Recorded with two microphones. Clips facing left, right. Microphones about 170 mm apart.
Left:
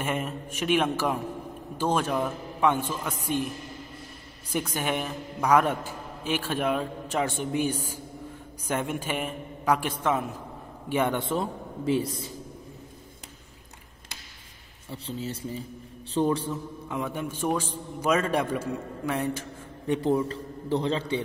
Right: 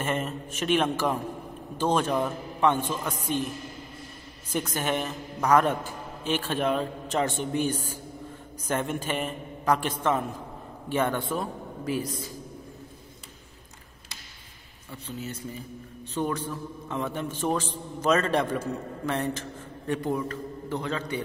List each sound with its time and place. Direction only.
0.0 s a man's voice: 10° left (ahead or behind)
4.5 s a man's voice: 10° left (ahead or behind); by 12.3 s 25° left (ahead or behind)
14.9 s a man's voice: 30° left (ahead or behind)
16.9 s a man's voice: 10° left (ahead or behind)
19.9 s a man's voice: 25° left (ahead or behind)